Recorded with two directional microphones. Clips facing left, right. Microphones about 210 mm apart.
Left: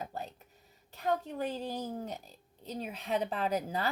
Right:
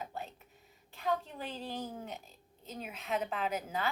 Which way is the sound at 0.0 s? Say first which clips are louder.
Left 2 dB; 40° left (ahead or behind).